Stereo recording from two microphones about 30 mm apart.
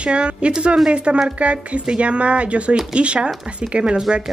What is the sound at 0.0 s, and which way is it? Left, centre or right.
Speech, right.